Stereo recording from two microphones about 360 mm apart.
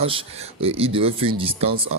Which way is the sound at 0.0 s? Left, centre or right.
Centre.